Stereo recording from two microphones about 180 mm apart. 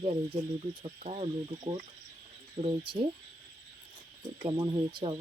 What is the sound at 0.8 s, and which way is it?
Speech, 30° right (ahead or behind).